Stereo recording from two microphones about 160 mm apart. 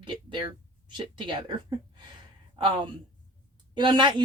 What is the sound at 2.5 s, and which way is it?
Speech, 30° right (ahead or behind).